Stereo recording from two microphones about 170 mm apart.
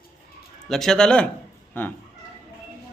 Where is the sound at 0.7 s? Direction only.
Centre (ahead or behind).